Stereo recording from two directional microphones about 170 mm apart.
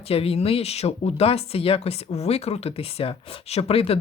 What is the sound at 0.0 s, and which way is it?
Speech, 35° left (ahead or behind).